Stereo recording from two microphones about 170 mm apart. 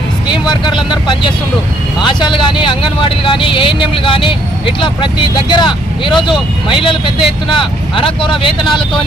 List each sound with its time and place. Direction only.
0.3 s speech: 25° left (ahead or behind)